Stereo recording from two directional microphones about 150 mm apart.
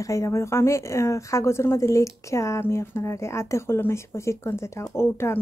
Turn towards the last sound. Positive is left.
turn(degrees=15)  # may be behind; listen again after turning